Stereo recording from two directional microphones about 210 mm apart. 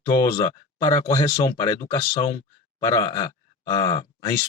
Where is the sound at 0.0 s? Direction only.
15° left (ahead or behind).